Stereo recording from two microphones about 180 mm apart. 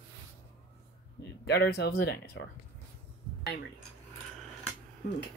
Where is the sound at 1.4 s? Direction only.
65° left (ahead or behind).